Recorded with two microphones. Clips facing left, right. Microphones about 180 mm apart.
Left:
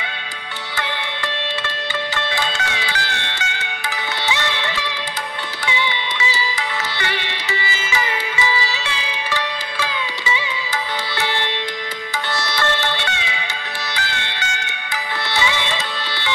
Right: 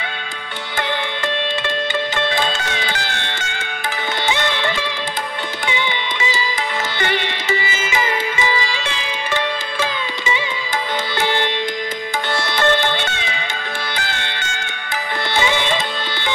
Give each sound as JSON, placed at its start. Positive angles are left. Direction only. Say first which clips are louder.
{"t": 2.1, "sound": "music", "louder": "right 4 dB", "side_deg": -50}
{"t": 12.4, "sound": "sitar", "louder": "right 5 dB", "side_deg": -50}
{"t": 13.9, "sound": "music", "louder": "right 1 dB", "side_deg": -50}